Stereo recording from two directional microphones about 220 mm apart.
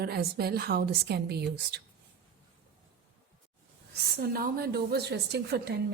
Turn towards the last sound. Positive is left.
turn(degrees=-45)  # may be behind; listen again after turning